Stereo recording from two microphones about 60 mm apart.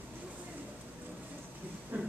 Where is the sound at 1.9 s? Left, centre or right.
Right.